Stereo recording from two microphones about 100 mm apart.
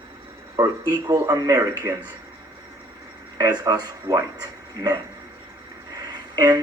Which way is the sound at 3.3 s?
35° right (ahead or behind).